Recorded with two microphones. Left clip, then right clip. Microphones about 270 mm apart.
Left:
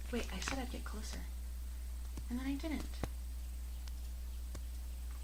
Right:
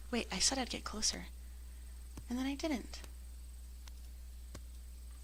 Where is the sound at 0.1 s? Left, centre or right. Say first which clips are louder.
Right 6 dB; right.